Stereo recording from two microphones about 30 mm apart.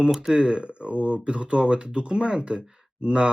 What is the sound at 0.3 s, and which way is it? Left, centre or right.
Speech, right.